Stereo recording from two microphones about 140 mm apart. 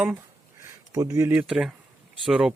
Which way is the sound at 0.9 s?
25° right (ahead or behind).